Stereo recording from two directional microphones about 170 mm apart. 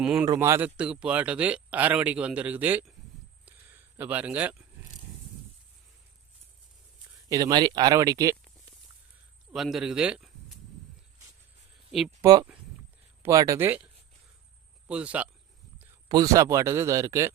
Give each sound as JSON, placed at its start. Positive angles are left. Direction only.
{"t": 0.0, "sound": "speech", "side_deg": -5}
{"t": 3.4, "sound": "a sound", "side_deg": -10}
{"t": 7.3, "sound": "speech", "side_deg": -20}
{"t": 9.5, "sound": "speech", "side_deg": 0}
{"t": 11.9, "sound": "speech", "side_deg": 0}
{"t": 12.2, "sound": "speech", "side_deg": -25}
{"t": 16.0, "sound": "speech", "side_deg": -20}